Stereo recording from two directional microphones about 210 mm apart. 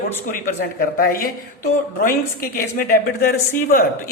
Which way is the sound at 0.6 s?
45° left (ahead or behind).